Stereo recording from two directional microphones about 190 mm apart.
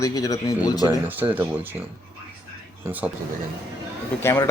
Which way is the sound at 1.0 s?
10° right (ahead or behind).